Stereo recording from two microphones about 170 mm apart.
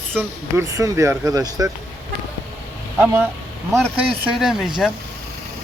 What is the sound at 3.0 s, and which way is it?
Speech, 15° right (ahead or behind).